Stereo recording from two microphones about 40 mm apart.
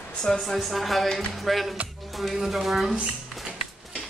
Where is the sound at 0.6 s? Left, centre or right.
Centre.